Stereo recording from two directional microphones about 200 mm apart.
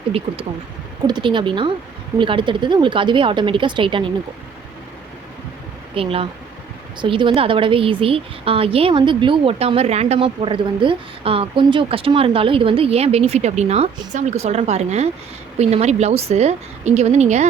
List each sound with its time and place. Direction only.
1.0 s a woman's voice: 20° right (ahead or behind)
5.9 s a woman's voice: 30° right (ahead or behind)